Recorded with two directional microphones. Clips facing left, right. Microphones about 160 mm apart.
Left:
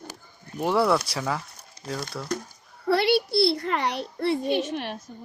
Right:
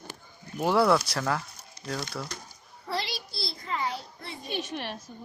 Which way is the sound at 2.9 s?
65° left (ahead or behind).